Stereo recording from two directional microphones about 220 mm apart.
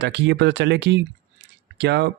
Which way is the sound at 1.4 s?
50° right (ahead or behind).